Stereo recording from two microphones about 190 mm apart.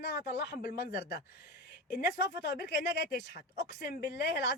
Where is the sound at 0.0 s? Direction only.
55° left (ahead or behind).